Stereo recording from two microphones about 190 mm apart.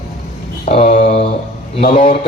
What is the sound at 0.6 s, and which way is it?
Speech, 35° left (ahead or behind).